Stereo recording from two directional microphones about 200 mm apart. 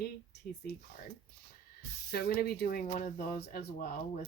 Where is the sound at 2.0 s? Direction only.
50° left (ahead or behind).